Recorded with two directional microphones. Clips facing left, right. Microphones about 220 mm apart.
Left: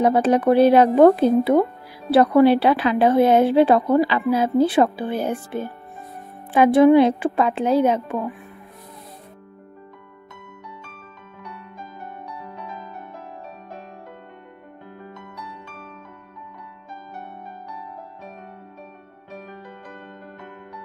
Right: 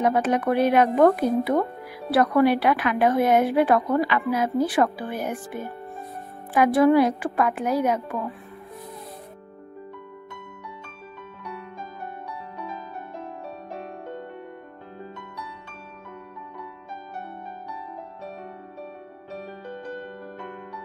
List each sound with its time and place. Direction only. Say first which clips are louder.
0.0 s speech: left 5 dB; 30° left (ahead or behind)